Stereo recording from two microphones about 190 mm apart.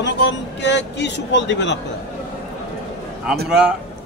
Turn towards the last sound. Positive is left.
turn(degrees=-5)  # may be behind; listen again after turning